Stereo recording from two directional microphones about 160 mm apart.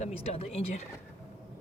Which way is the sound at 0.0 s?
40° left (ahead or behind).